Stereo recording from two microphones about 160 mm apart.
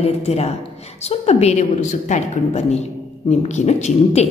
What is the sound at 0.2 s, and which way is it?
A woman's voice, 40° left (ahead or behind).